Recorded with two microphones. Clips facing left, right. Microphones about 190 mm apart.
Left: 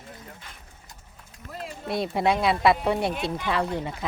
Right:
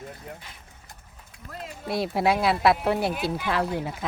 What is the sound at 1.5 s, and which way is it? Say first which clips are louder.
Speech: even; centre (ahead or behind).